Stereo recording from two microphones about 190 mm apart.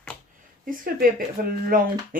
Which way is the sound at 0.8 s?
50° right (ahead or behind).